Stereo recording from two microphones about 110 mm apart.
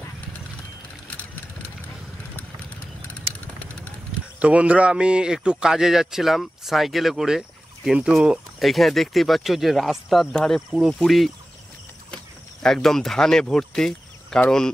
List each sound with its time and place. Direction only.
3.1 s vehicle: 10° left (ahead or behind)
4.4 s a man's voice: 10° right (ahead or behind)
12.6 s a man's voice: 5° left (ahead or behind)